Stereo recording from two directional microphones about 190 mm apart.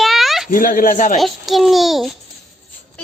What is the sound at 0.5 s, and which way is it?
Speech, 45° left (ahead or behind).